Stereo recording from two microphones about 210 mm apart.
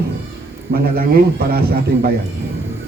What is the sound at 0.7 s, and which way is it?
A man's voice, 45° right (ahead or behind).